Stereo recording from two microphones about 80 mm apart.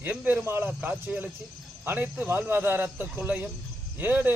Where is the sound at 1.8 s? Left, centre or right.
Right.